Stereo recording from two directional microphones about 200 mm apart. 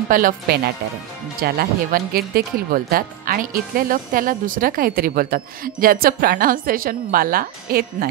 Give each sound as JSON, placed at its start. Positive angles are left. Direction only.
{"t": 0.1, "sound": "speech", "side_deg": -45}